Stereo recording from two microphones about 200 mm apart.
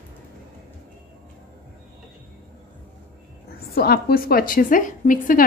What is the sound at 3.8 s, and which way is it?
A woman's voice, 50° left (ahead or behind).